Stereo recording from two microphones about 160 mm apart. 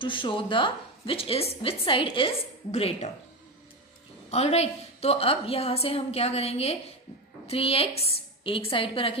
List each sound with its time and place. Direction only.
0.0 s a woman's voice: 30° left (ahead or behind)
4.3 s a woman's voice: 40° left (ahead or behind)